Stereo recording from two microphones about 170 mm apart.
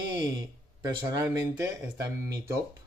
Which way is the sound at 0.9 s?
20° right (ahead or behind).